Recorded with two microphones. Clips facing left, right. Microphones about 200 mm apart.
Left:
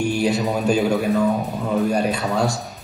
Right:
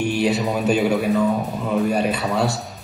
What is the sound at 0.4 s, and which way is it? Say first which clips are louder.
Speech: even; centre (ahead or behind).